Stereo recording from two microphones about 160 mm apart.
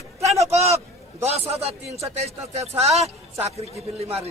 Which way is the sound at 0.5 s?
45° right (ahead or behind).